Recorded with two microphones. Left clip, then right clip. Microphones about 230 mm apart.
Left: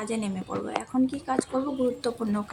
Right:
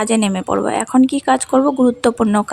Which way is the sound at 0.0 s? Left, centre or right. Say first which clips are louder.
Right 15 dB; right.